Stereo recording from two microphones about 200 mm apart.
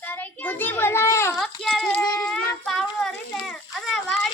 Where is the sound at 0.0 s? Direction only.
10° left (ahead or behind).